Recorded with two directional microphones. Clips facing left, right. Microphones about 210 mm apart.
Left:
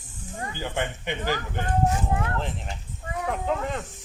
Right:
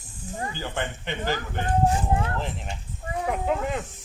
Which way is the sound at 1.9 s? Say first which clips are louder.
Right 2 dB; 30° right (ahead or behind).